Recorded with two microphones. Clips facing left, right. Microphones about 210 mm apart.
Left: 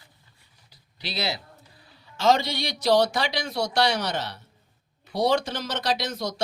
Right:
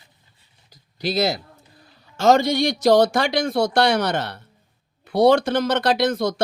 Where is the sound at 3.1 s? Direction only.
50° right (ahead or behind).